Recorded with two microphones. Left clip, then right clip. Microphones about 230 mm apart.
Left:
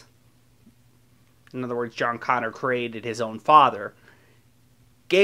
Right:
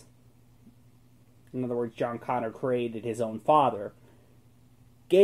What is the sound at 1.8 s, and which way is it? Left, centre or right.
Speech, centre.